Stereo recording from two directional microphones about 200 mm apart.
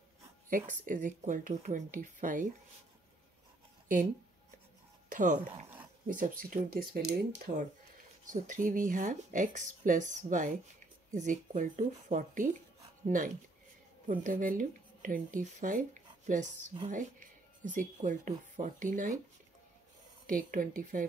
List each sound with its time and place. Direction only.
0.5 s speech: 40° right (ahead or behind)
5.1 s speech: 40° right (ahead or behind)
20.2 s speech: 45° right (ahead or behind)